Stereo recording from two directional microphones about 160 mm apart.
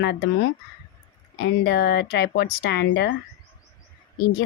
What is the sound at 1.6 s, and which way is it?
Speech, 90° left.